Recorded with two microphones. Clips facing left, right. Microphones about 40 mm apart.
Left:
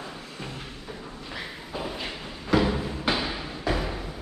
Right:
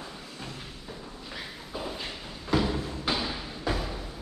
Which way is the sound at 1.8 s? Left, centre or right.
Left.